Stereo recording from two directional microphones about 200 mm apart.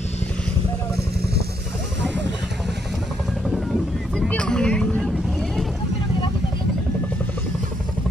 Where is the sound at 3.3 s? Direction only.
Centre (ahead or behind).